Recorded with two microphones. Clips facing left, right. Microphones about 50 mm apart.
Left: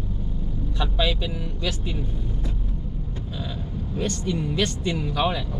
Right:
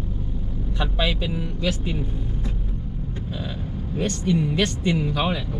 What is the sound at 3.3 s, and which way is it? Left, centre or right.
Speech, centre.